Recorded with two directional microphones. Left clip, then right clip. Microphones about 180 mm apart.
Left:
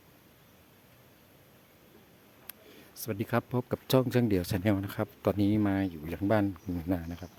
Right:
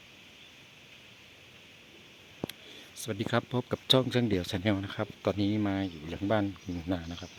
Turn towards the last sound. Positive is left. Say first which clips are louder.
# left 1 dB
turn(degrees=20)  # may be behind; listen again after turning